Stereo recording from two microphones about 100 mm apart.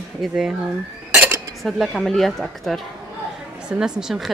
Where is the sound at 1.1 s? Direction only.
20° right (ahead or behind).